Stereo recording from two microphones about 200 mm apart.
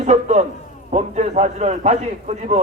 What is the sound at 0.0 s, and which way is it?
A man's voice, 35° right (ahead or behind).